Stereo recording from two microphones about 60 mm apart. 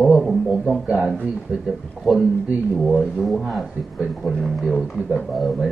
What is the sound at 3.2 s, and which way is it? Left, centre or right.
A man's voice, centre.